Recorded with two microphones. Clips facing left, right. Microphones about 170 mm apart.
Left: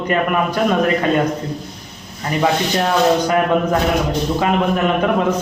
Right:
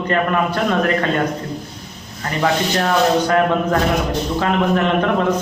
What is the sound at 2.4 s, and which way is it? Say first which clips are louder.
A man's voice: left 1 dB; 15° left (ahead or behind).